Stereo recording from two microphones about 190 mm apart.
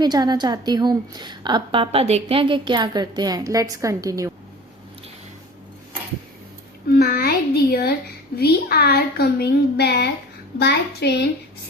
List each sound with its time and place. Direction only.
0.0 s a woman's voice: 20° right (ahead or behind)
6.8 s a sound: 55° left (ahead or behind)
8.4 s a woman's voice: 55° left (ahead or behind)